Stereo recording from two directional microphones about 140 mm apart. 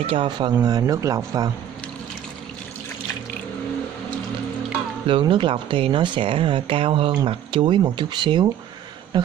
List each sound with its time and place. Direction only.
0.0 s speech: 40° right (ahead or behind)
5.2 s speech: 35° right (ahead or behind)